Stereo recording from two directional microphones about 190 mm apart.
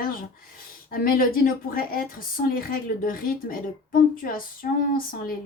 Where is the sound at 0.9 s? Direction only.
50° left (ahead or behind).